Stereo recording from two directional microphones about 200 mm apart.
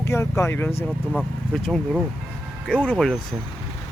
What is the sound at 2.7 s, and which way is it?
Speech, 5° left (ahead or behind).